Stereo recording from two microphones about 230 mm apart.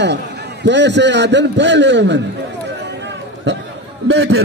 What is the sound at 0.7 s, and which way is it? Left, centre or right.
A man's voice, right.